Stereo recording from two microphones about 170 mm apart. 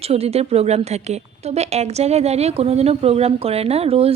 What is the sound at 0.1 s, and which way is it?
A woman's voice, 35° right (ahead or behind).